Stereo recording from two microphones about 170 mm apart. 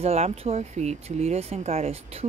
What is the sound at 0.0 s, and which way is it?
Speech, 40° right (ahead or behind).